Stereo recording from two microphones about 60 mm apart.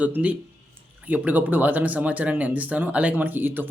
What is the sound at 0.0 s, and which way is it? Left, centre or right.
Speech, right.